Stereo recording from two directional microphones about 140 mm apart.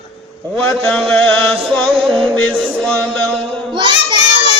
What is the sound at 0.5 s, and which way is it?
Music, 5° left (ahead or behind).